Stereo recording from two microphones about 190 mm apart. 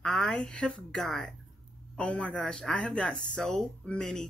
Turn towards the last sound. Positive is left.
turn(degrees=5)  # may be behind; listen again after turning